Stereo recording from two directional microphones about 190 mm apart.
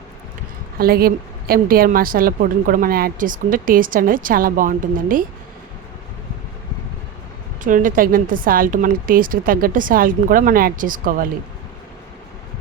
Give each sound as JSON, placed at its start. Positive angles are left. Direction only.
{"t": 0.8, "sound": "a woman's voice", "side_deg": -50}
{"t": 7.6, "sound": "a woman's voice", "side_deg": -45}